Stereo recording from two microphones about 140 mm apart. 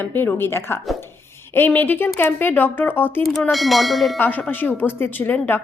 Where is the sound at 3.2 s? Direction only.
Centre (ahead or behind).